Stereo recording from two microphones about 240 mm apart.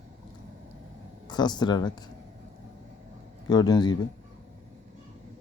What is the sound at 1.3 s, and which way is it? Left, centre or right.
Speech, centre.